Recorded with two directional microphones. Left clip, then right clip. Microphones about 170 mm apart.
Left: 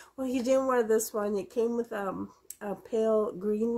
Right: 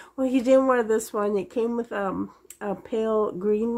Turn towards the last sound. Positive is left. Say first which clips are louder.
# right 6 dB
turn(degrees=-50)  # may be behind; listen again after turning